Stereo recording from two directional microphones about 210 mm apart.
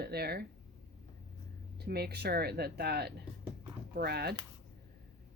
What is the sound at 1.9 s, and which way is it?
Speech, 50° right (ahead or behind).